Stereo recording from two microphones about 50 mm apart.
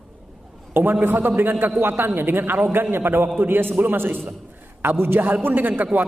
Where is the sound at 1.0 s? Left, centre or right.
Right.